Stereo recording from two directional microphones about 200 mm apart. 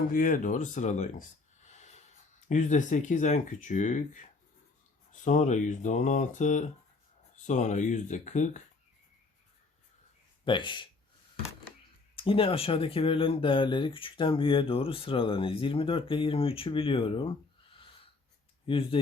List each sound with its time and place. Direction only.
0.1 s speech: 40° left (ahead or behind)
1.6 s snort: 35° left (ahead or behind)
2.5 s speech: 35° left (ahead or behind)
10.4 s speech: 25° left (ahead or behind)
12.1 s speech: 25° left (ahead or behind)